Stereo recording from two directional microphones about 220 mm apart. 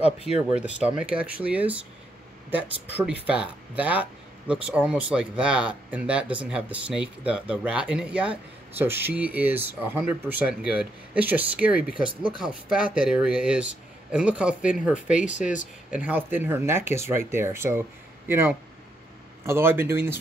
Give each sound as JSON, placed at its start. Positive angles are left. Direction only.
{"t": 0.3, "sound": "speech", "side_deg": -5}
{"t": 12.1, "sound": "speech", "side_deg": -25}
{"t": 12.4, "sound": "speech", "side_deg": -5}